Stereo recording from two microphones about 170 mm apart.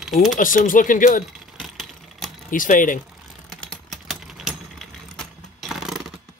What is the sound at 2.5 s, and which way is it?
Speech, 50° left (ahead or behind).